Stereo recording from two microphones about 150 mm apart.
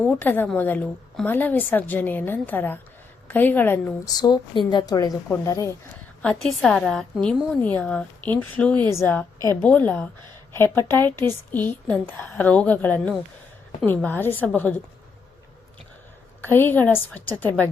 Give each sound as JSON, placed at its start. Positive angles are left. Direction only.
{"t": 0.0, "sound": "a woman's voice", "side_deg": 10}
{"t": 4.0, "sound": "a woman's voice", "side_deg": 25}
{"t": 6.2, "sound": "a woman's voice", "side_deg": 5}
{"t": 16.4, "sound": "a woman's voice", "side_deg": 15}